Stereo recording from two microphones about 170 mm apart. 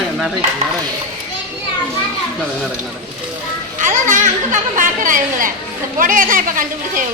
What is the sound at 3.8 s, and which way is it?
Chatter, 50° right (ahead or behind).